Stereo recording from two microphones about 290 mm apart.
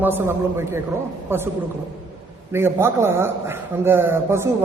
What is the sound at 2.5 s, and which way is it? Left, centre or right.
A man's voice, centre.